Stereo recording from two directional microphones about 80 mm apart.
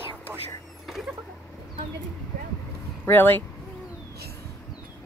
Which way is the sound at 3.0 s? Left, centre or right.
Left.